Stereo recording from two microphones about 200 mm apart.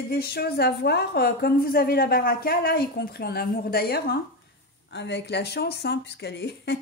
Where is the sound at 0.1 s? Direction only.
50° left (ahead or behind).